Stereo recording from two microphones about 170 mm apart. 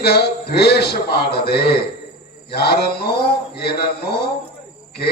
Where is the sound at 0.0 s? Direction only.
70° left (ahead or behind).